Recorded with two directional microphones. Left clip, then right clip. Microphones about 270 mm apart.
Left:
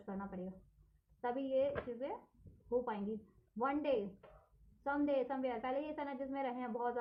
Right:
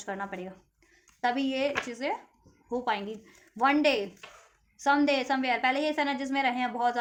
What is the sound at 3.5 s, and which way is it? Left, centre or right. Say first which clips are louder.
A woman's voice: right 12 dB; right.